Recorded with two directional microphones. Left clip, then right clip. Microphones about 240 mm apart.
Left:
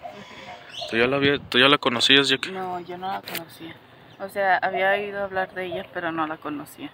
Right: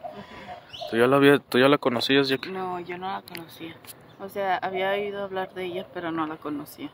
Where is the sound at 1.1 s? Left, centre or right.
Right.